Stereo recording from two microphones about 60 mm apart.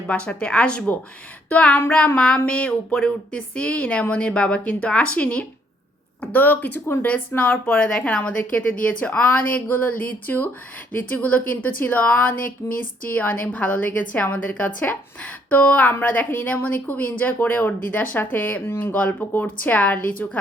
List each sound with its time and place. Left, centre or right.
0.1 s speech: left
6.8 s speech: left
7.1 s speech: left
7.7 s speech: centre; by 18.9 s left
18.9 s speech: left